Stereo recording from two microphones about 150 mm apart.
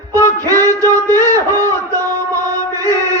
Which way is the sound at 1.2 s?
15° left (ahead or behind).